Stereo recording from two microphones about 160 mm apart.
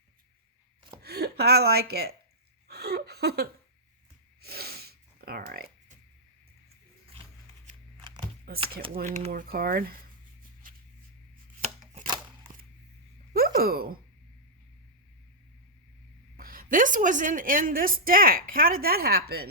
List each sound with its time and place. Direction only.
1.0 s a woman's voice: 80° right
2.6 s a sound: 90° right
4.4 s snort: 75° right (ahead or behind)
8.5 s speech: 75° right (ahead or behind)
9.0 s a woman's voice: 50° right (ahead or behind); by 9.9 s 70° right (ahead or behind)
11.6 s chopping: 45° right (ahead or behind)
13.3 s a sound: 70° right (ahead or behind)
16.4 s a woman's voice: 60° right (ahead or behind)